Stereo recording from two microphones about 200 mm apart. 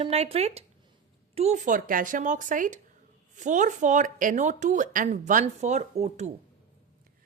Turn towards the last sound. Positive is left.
turn(degrees=-35)  # may be behind; listen again after turning